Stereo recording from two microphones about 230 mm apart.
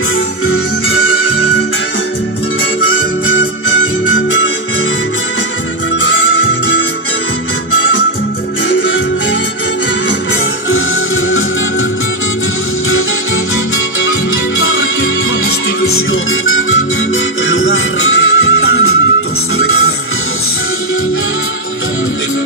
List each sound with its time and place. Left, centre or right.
0.5 s music: left
2.9 s music: left
5.9 s music: left
8.6 s music: left
14.0 s music: left